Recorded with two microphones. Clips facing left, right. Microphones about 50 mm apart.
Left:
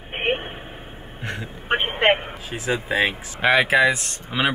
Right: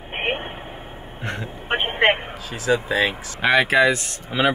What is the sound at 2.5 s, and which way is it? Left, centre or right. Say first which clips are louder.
Speech: right 3 dB; left.